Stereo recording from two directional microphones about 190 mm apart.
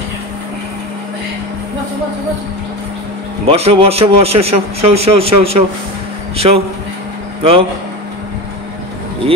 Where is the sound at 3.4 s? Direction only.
30° right (ahead or behind).